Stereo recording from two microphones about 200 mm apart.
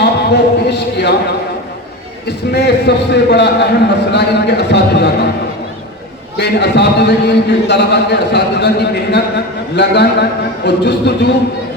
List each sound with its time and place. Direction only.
0.0 s a sound: 60° left (ahead or behind)
2.5 s a man's voice: 55° left (ahead or behind)
6.3 s a man's voice: 60° left (ahead or behind)